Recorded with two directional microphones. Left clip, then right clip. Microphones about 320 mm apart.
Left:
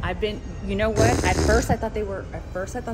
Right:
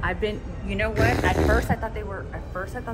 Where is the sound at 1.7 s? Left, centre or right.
Left.